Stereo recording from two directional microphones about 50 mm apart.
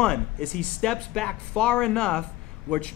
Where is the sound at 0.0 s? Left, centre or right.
Centre.